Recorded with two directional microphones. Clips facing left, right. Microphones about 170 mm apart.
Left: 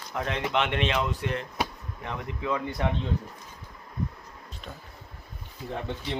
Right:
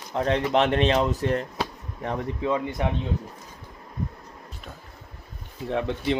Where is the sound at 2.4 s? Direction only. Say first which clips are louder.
Right 2 dB; 20° right (ahead or behind).